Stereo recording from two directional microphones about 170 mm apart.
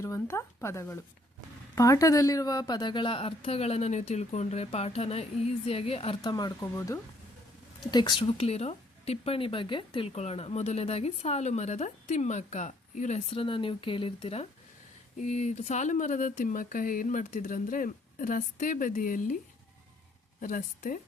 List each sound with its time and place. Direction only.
0.0 s speech: 15° left (ahead or behind); by 6.3 s 35° left (ahead or behind)
6.3 s speech: 20° left (ahead or behind); by 19.4 s 50° left (ahead or behind)
20.4 s speech: 50° left (ahead or behind)